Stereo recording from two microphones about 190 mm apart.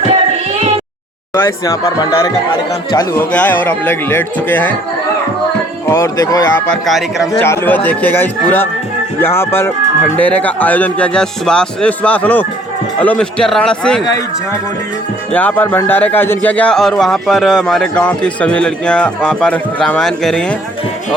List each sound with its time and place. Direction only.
1.3 s speech: 15° left (ahead or behind)
5.9 s speech: 15° left (ahead or behind)
6.7 s speech: centre (ahead or behind)
7.4 s speech: 10° left (ahead or behind)
15.3 s speech: 10° left (ahead or behind)